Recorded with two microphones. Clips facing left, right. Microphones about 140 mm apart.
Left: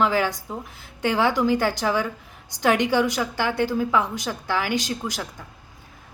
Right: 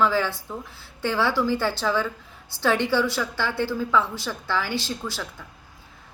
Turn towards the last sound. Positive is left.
turn(degrees=15)  # may be behind; listen again after turning